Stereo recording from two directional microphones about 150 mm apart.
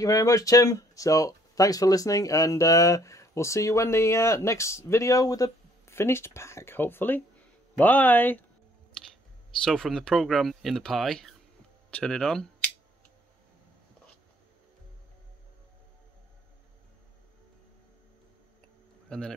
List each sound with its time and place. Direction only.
0.0 s speech: 20° left (ahead or behind)
9.7 s speech: centre (ahead or behind)
19.0 s speech: 5° left (ahead or behind)